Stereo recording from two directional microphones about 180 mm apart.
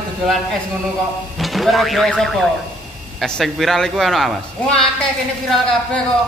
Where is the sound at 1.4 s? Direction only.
Centre (ahead or behind).